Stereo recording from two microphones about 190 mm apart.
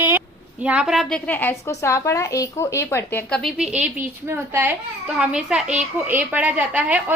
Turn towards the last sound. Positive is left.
turn(degrees=-10)  # may be behind; listen again after turning